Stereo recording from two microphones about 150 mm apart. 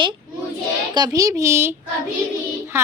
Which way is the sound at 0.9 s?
25° right (ahead or behind).